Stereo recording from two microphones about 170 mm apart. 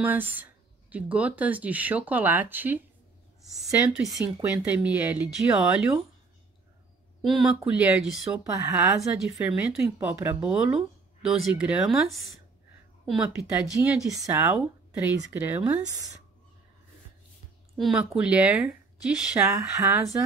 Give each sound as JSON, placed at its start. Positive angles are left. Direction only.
{"t": 0.0, "sound": "speech", "side_deg": -10}
{"t": 4.2, "sound": "speech", "side_deg": -10}
{"t": 7.2, "sound": "speech", "side_deg": -5}
{"t": 14.1, "sound": "speech", "side_deg": -15}
{"t": 15.6, "sound": "speech", "side_deg": -20}
{"t": 17.7, "sound": "speech", "side_deg": -5}